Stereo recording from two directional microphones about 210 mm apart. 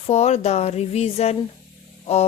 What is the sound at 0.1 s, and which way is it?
Speech, 30° left (ahead or behind).